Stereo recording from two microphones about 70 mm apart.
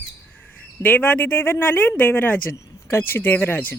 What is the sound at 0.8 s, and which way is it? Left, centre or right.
Speech, left.